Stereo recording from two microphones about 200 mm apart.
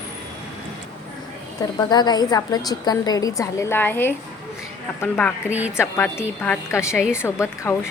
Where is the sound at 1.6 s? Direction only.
20° left (ahead or behind).